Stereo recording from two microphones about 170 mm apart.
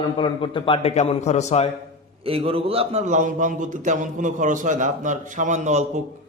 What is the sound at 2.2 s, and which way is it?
A man's voice, 35° right (ahead or behind).